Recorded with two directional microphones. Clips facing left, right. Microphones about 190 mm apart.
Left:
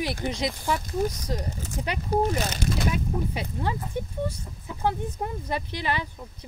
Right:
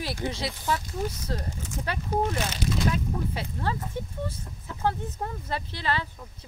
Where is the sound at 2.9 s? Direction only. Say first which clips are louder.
Left 1 dB; 15° left (ahead or behind).